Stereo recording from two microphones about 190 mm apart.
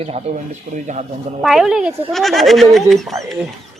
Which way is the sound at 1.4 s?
Centre (ahead or behind).